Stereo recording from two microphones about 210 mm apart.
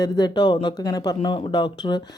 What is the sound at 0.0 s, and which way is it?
Speech, 20° left (ahead or behind).